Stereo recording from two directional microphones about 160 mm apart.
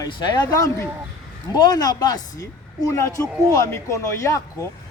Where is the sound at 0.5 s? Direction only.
20° left (ahead or behind).